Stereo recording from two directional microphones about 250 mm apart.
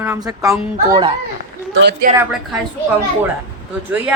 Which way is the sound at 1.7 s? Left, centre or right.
Right.